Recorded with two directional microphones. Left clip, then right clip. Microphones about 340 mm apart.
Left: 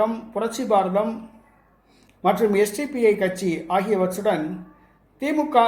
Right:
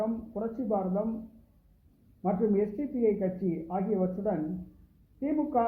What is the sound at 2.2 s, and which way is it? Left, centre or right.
Speech, centre.